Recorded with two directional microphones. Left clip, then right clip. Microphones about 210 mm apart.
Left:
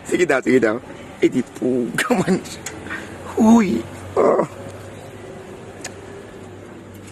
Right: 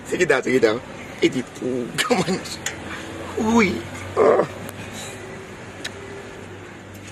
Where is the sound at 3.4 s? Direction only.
60° left (ahead or behind).